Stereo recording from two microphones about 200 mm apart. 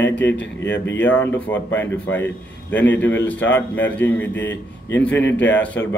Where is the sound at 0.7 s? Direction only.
65° left (ahead or behind).